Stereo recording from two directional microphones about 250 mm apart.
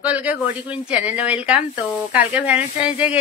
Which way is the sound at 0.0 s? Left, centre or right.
Centre.